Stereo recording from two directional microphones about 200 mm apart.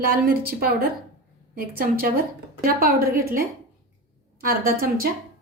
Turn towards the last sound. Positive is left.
turn(degrees=-45)  # may be behind; listen again after turning